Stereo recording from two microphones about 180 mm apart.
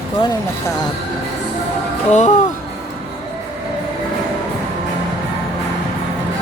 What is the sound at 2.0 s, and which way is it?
Speech, 40° left (ahead or behind).